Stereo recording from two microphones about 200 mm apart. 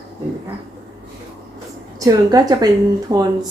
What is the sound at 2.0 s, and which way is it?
A woman's voice, 20° right (ahead or behind).